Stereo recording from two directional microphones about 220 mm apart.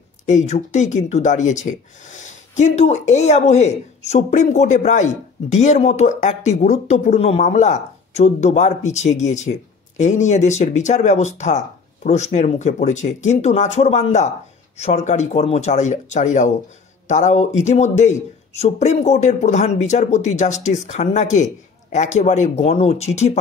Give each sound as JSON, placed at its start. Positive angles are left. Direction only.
{"t": 0.3, "sound": "speech", "side_deg": 30}